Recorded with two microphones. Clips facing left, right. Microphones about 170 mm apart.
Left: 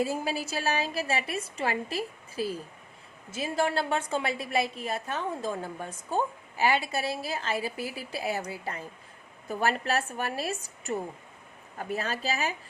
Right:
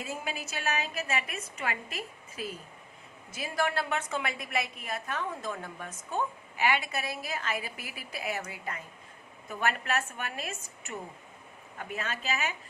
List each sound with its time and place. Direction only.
0.0 s a woman's voice: 35° left (ahead or behind)